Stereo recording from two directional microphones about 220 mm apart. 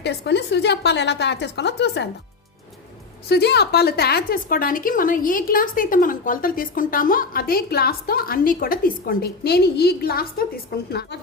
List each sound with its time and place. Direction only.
0.0 s a woman's voice: 50° left (ahead or behind)
3.2 s a woman's voice: 50° left (ahead or behind)